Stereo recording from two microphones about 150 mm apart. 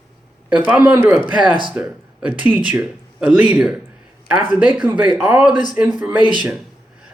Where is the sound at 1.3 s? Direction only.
30° right (ahead or behind).